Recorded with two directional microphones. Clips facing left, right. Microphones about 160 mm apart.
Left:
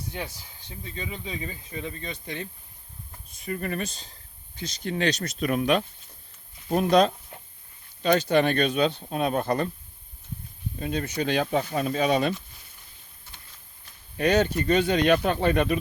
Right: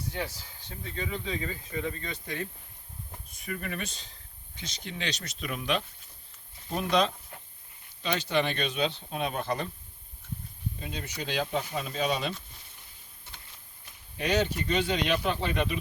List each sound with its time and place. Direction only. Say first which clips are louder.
0.1 s speech: even; 15° left (ahead or behind); by 9.6 s 50° left (ahead or behind)
10.8 s speech: left 12 dB; 50° left (ahead or behind)
14.2 s speech: left 6 dB; 50° left (ahead or behind)